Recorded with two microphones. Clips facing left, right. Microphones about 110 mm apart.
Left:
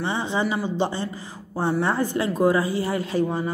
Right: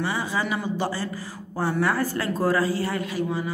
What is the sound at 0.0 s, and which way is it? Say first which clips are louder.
Speech: left 2 dB; 25° left (ahead or behind).